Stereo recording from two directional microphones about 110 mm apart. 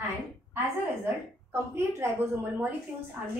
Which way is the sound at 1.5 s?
25° right (ahead or behind).